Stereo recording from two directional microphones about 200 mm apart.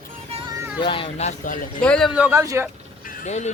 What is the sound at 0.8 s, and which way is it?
Speech, 25° left (ahead or behind).